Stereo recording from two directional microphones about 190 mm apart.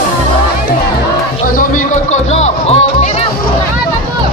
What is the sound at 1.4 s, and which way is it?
Music, 45° left (ahead or behind).